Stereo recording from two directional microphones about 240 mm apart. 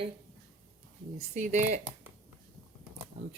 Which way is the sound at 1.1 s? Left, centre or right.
Right.